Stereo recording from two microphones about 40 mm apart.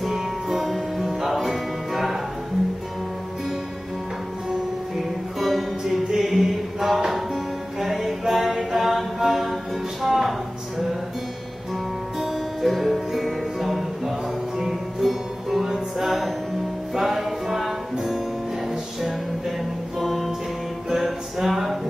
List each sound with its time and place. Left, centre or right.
0.0 s music: centre
5.4 s music: centre
7.8 s mantra: centre
10.0 s music: centre
12.2 s music: centre
20.0 s music: centre
20.9 s a sound: centre